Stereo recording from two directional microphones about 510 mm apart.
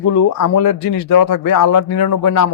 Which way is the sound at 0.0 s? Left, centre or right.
Left.